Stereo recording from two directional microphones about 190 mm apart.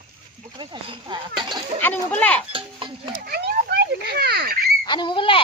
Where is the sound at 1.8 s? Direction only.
10° left (ahead or behind).